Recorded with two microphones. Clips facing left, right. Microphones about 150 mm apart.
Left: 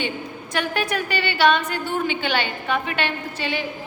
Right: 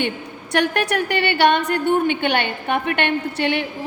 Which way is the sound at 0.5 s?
70° right (ahead or behind).